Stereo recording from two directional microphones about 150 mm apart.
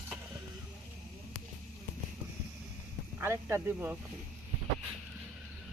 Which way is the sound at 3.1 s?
15° right (ahead or behind).